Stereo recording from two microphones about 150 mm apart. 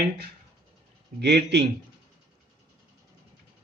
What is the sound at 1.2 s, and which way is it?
Speech, 90° right.